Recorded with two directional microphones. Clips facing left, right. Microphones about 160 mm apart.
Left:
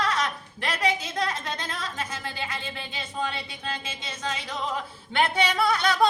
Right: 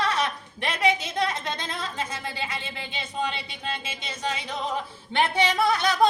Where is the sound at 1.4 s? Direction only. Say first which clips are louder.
Right 1 dB; 25° right (ahead or behind).